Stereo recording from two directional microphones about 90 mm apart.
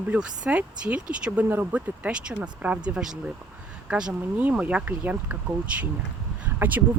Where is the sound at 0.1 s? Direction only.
15° right (ahead or behind).